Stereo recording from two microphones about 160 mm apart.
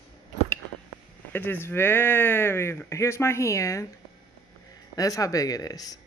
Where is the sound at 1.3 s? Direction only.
15° left (ahead or behind).